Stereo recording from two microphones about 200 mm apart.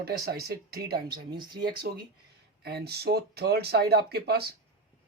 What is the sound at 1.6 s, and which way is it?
Speech, 55° right (ahead or behind).